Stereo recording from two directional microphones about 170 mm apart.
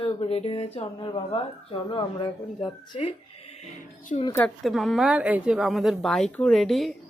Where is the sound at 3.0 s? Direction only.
35° left (ahead or behind).